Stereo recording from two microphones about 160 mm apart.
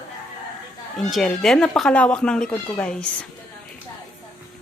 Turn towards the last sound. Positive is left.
turn(degrees=5)  # may be behind; listen again after turning